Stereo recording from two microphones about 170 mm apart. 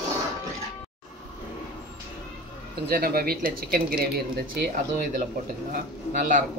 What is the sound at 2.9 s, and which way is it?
Speech, 60° right (ahead or behind).